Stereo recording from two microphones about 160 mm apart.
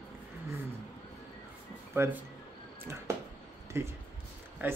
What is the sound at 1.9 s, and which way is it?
Speech, 15° right (ahead or behind).